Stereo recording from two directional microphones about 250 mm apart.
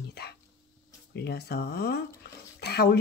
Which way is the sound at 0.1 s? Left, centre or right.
Left.